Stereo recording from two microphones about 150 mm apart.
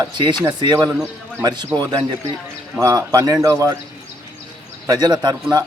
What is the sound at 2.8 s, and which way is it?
Speech, 20° right (ahead or behind).